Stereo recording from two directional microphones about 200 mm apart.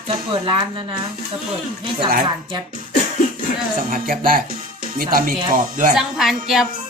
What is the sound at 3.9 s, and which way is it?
Speech, 45° right (ahead or behind).